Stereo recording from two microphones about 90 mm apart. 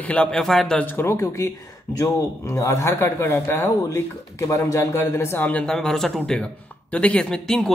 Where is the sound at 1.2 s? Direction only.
35° left (ahead or behind).